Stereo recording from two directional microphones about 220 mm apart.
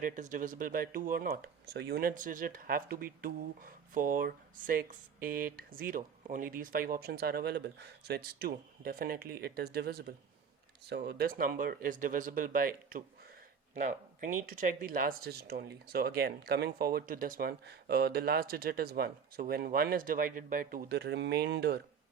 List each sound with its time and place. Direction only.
0.0 s speech: 35° right (ahead or behind)